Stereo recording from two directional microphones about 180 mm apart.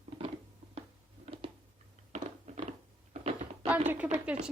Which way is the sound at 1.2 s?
30° right (ahead or behind).